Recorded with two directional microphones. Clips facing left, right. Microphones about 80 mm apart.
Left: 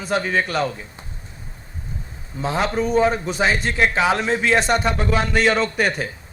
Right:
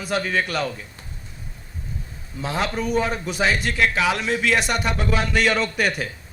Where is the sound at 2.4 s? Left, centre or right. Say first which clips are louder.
Left 4 dB; left.